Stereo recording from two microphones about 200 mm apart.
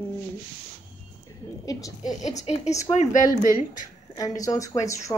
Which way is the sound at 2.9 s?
20° left (ahead or behind).